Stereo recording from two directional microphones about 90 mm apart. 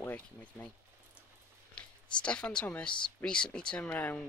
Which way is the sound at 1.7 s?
10° left (ahead or behind).